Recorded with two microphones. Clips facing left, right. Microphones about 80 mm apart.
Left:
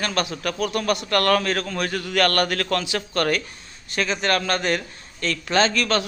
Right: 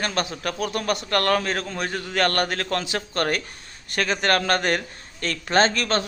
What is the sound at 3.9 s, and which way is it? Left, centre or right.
A man's voice, right.